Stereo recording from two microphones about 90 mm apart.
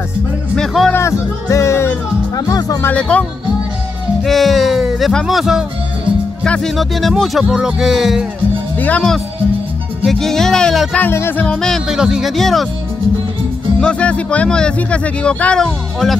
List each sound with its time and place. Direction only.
0.6 s speech: 5° left (ahead or behind)
0.9 s speech: 30° left (ahead or behind)
2.3 s speech: 45° left (ahead or behind)
3.0 s speech: 15° left (ahead or behind)
4.2 s music: centre (ahead or behind)
5.2 s speech: 5° right (ahead or behind)
6.4 s speech: 10° left (ahead or behind)
8.7 s speech: 20° left (ahead or behind)
10.0 s speech: 5° left (ahead or behind)
11.0 s music: 25° left (ahead or behind)
11.4 s speech: 10° left (ahead or behind)
11.9 s speech: 5° right (ahead or behind)
13.7 s speech: 10° left (ahead or behind)